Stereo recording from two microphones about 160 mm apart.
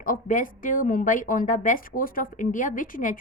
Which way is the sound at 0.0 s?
60° left (ahead or behind).